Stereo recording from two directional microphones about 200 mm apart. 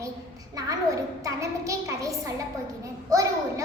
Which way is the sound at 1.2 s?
15° right (ahead or behind).